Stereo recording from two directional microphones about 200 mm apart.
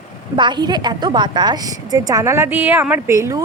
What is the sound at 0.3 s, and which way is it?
A woman's voice, 20° right (ahead or behind).